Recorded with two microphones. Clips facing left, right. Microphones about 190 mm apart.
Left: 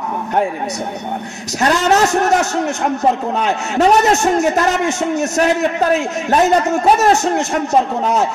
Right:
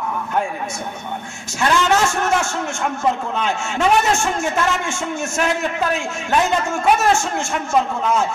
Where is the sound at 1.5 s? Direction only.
40° left (ahead or behind).